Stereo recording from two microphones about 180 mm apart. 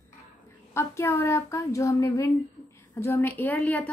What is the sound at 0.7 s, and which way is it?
A woman's voice, 15° left (ahead or behind).